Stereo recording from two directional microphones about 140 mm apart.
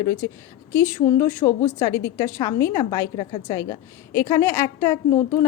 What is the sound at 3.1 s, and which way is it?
Speech, 35° left (ahead or behind).